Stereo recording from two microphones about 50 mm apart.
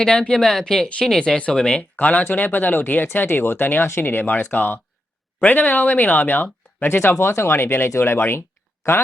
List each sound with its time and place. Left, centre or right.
0.0 s speech: centre
2.0 s speech: left
3.2 s speech: left